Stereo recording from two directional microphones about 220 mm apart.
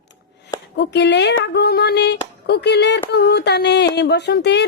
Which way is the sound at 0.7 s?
50° left (ahead or behind).